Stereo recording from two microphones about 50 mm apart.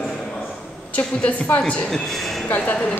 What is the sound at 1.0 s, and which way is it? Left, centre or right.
Speech, left.